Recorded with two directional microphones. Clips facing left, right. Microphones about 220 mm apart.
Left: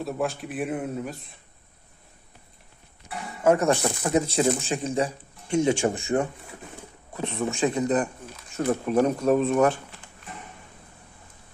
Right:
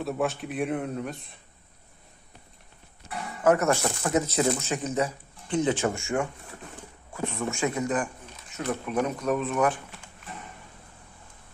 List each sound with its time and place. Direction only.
0.0 s speech: centre (ahead or behind)
3.4 s speech: 25° left (ahead or behind)
5.0 s speech: 10° left (ahead or behind)
6.0 s speech: 35° left (ahead or behind)
7.3 s speech: 35° left (ahead or behind)